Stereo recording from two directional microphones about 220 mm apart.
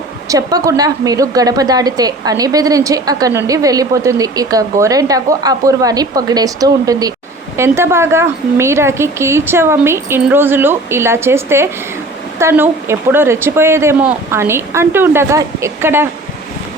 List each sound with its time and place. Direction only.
0.3 s a woman's voice: 15° right (ahead or behind)